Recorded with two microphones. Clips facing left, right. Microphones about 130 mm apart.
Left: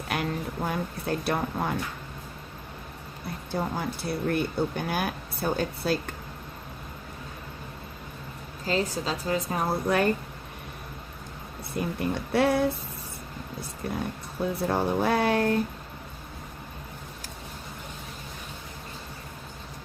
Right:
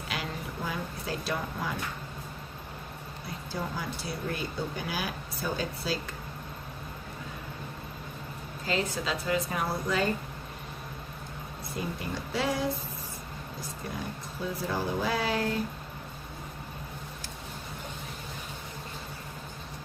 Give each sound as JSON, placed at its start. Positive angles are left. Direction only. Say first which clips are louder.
{"t": 0.1, "sound": "speech", "louder": "left 7 dB", "side_deg": 55}
{"t": 3.5, "sound": "speech", "louder": "left 5 dB", "side_deg": 55}
{"t": 8.6, "sound": "a woman's voice", "louder": "left 3 dB", "side_deg": 35}
{"t": 9.8, "sound": "speech", "louder": "left 6 dB", "side_deg": 60}
{"t": 11.7, "sound": "speech", "louder": "left 6 dB", "side_deg": 60}
{"t": 14.4, "sound": "speech", "louder": "left 6 dB", "side_deg": 60}